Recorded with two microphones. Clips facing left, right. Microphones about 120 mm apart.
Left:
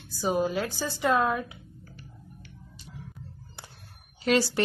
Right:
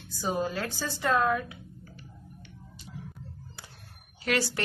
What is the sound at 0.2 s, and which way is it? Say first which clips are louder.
A woman's voice: left 4 dB; 15° left (ahead or behind).